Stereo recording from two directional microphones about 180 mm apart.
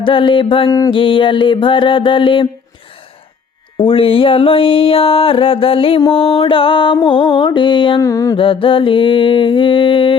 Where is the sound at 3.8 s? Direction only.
30° left (ahead or behind).